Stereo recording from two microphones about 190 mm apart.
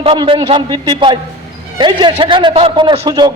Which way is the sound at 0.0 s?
30° right (ahead or behind).